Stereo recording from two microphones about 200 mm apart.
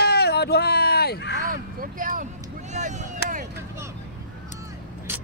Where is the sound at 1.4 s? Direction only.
45° right (ahead or behind).